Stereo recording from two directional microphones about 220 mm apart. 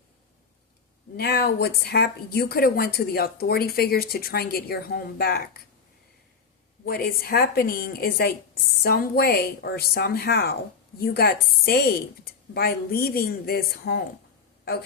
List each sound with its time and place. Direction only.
1.1 s a woman's voice: 45° left (ahead or behind)
6.8 s a woman's voice: 45° left (ahead or behind)